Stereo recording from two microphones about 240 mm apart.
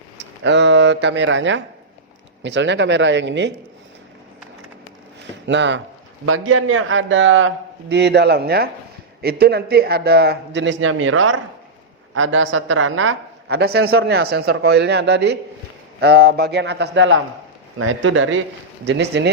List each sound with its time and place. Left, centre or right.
0.4 s speech: right
5.5 s speech: right